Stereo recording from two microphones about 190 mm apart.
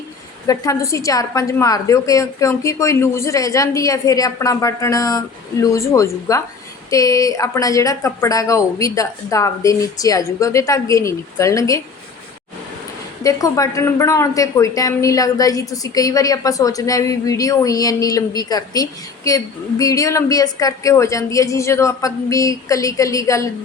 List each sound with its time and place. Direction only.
0.4 s a woman's voice: 15° left (ahead or behind)
13.2 s a woman's voice: 15° left (ahead or behind)